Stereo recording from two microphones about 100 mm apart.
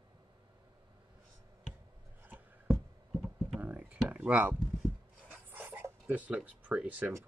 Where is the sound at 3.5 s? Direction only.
15° right (ahead or behind).